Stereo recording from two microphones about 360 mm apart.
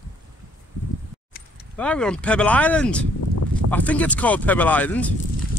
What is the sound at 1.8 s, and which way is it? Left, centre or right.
Speech, centre.